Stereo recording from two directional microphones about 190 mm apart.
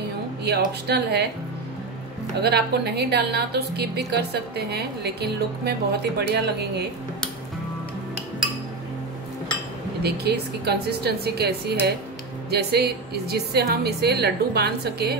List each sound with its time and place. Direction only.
0.5 s a woman's voice: 60° right (ahead or behind)
2.4 s a woman's voice: 60° right (ahead or behind)
10.0 s a woman's voice: 55° right (ahead or behind)